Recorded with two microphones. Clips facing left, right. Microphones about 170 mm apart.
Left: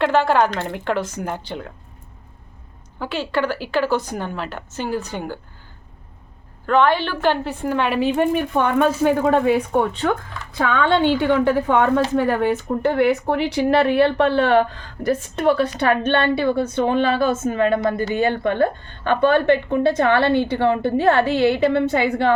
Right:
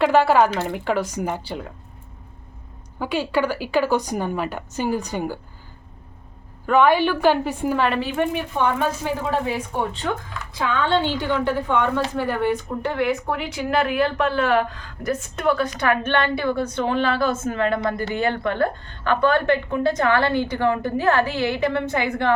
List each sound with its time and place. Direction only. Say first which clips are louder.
0.0 s a woman's voice: right 1 dB; 10° right (ahead or behind)
3.0 s a woman's voice: right 1 dB; 10° right (ahead or behind)
6.7 s a woman's voice: right 1 dB; 10° right (ahead or behind)
8.5 s speech: left 3 dB; 55° left (ahead or behind)
12.9 s a woman's voice: left 5 dB; 35° left (ahead or behind)